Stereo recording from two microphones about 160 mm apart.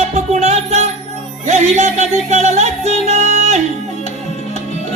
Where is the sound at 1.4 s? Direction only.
45° right (ahead or behind).